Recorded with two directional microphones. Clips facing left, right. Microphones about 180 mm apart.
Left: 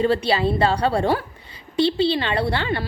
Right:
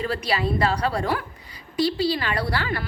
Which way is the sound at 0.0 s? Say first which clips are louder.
Left 6 dB; 30° left (ahead or behind).